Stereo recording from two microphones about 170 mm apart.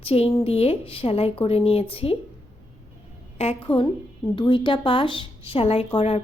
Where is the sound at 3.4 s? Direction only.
35° left (ahead or behind).